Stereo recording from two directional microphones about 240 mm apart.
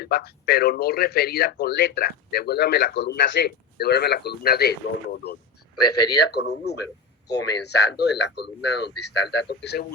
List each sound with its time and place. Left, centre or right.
0.0 s a man's voice: left